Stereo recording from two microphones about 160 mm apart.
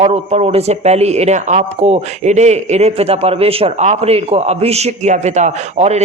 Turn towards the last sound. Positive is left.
turn(degrees=-45)  # may be behind; listen again after turning